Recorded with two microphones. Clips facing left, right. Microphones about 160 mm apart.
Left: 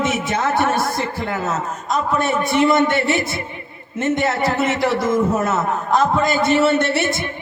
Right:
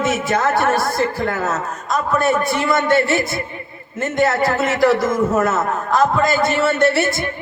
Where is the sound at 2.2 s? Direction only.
20° left (ahead or behind).